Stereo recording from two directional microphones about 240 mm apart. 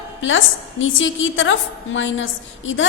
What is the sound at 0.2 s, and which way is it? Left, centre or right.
A woman's voice, left.